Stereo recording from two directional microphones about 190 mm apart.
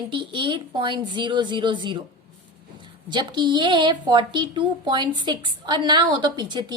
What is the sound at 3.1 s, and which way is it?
A child's voice, 25° right (ahead or behind).